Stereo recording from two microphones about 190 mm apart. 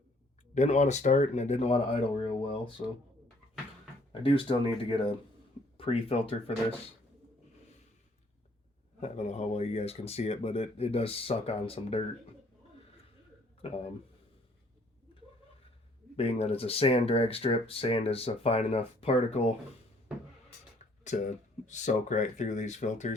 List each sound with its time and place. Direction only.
0.5 s speech: 40° left (ahead or behind)
4.1 s speech: 30° left (ahead or behind)
9.0 s speech: 35° left (ahead or behind)
13.6 s speech: 30° left (ahead or behind)
16.1 s speech: 30° left (ahead or behind)
21.0 s speech: 40° left (ahead or behind)